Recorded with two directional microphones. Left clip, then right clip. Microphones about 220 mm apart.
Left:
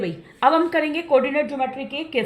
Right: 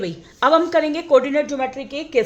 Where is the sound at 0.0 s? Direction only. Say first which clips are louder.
Even; 45° right (ahead or behind).